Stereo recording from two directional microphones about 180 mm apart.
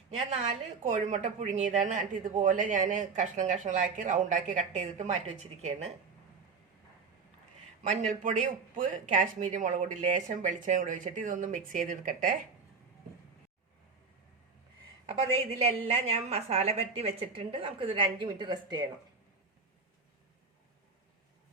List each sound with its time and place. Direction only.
0.3 s a woman's voice: 40° right (ahead or behind)
8.2 s a woman's voice: 45° right (ahead or behind)
15.6 s a woman's voice: 35° right (ahead or behind)